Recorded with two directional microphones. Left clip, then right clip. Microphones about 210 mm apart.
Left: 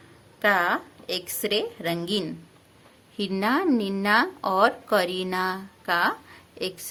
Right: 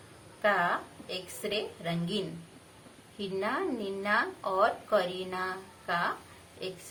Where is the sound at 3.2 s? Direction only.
60° left (ahead or behind).